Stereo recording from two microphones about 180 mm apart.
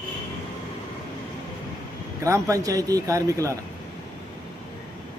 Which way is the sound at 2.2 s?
15° right (ahead or behind).